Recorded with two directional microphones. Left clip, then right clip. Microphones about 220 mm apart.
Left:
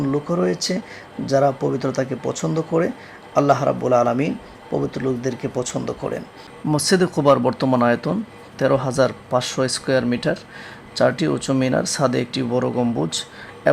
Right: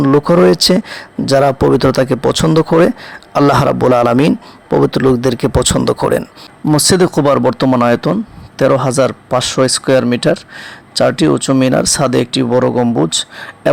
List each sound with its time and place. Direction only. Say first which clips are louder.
0.0 s speech: right 12 dB; 40° right (ahead or behind)
6.7 s speech: right 8 dB; 30° right (ahead or behind)